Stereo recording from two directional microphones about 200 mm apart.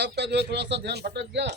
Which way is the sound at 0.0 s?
55° right (ahead or behind).